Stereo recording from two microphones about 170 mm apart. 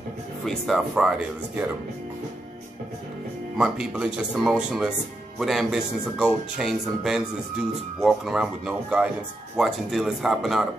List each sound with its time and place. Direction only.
0.5 s speech: centre (ahead or behind)
3.5 s speech: 5° right (ahead or behind)